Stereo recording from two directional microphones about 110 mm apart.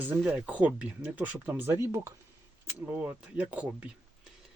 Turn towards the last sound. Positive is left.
turn(degrees=-10)  # may be behind; listen again after turning